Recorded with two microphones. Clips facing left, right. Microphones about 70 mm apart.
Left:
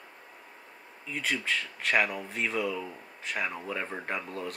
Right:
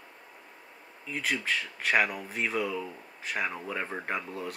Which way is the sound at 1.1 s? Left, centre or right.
Centre.